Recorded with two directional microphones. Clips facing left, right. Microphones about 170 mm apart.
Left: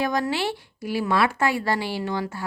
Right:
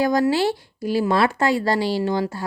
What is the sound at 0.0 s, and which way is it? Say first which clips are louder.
Speech: right 6 dB; 35° right (ahead or behind).